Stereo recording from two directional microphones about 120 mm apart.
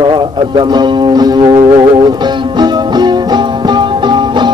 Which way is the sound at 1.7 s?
40° right (ahead or behind).